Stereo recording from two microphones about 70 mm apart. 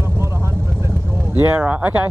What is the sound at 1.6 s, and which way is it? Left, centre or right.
Speech, right.